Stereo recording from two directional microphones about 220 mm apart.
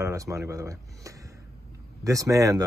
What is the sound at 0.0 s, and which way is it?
Speech, 15° right (ahead or behind).